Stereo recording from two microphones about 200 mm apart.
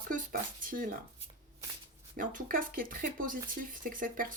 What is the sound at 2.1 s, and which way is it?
Speech, 40° right (ahead or behind).